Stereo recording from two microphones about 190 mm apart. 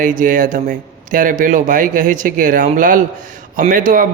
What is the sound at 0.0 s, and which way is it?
A man's voice, 45° right (ahead or behind).